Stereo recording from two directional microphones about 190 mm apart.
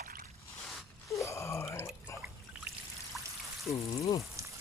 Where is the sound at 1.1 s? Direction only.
15° left (ahead or behind).